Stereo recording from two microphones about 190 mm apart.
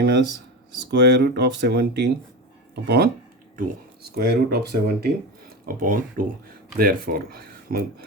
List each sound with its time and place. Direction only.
0.9 s speech: 60° right (ahead or behind)